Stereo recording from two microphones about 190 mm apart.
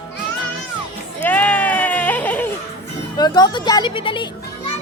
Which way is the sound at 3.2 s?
20° left (ahead or behind).